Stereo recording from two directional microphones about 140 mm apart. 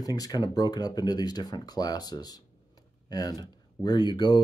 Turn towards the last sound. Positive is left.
turn(degrees=30)  # may be behind; listen again after turning